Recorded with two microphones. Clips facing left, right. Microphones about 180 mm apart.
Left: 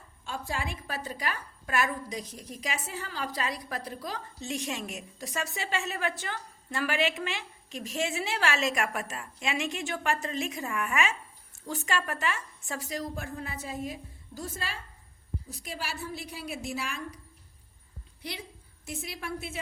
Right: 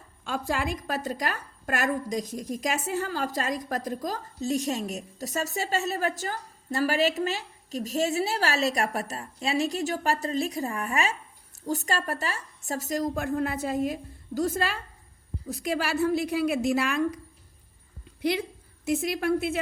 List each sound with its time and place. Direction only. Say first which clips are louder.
0.3 s a woman's voice: right 6 dB; 75° right (ahead or behind)
0.7 s a woman's voice: right 7 dB; 40° right (ahead or behind)
13.2 s a woman's voice: right 10 dB; 65° right (ahead or behind)
18.2 s a woman's voice: right 14 dB; 90° right; by 19.5 s 70° right (ahead or behind)